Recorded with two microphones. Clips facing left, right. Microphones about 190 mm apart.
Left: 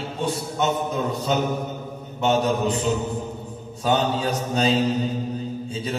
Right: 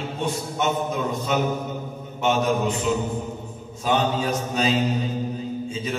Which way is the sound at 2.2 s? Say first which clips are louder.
Left 1 dB; 35° left (ahead or behind).